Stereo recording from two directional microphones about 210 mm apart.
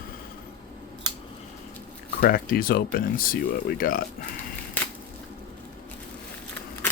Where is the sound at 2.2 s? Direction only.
45° left (ahead or behind).